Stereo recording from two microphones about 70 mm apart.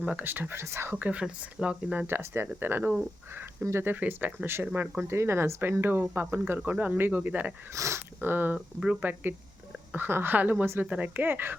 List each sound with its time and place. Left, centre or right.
0.0 s speech: centre
0.3 s speech: right
0.9 s speech: centre
2.0 s a woman's voice: right
7.7 s speech: right
8.2 s a woman's voice: right
8.5 s speech: centre
9.9 s a woman's voice: right